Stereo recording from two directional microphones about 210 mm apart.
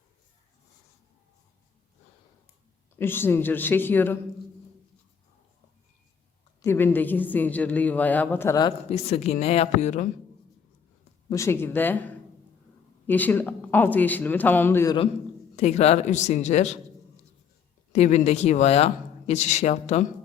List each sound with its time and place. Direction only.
2.9 s a woman's voice: 10° left (ahead or behind)
6.6 s a woman's voice: 10° left (ahead or behind); by 10.1 s 35° left (ahead or behind)
11.3 s a woman's voice: 15° left (ahead or behind)
15.5 s a man's voice: 30° left (ahead or behind)
17.9 s a man's voice: 35° left (ahead or behind)